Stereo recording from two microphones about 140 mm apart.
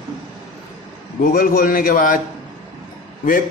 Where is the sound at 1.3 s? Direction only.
85° left.